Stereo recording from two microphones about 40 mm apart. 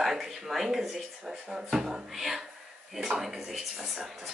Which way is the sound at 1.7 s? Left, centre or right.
Centre.